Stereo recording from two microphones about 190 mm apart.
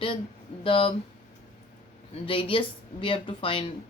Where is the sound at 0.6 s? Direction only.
30° left (ahead or behind).